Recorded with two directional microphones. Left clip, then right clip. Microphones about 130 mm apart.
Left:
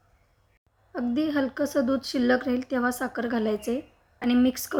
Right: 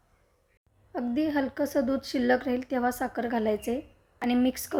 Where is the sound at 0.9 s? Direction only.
25° right (ahead or behind).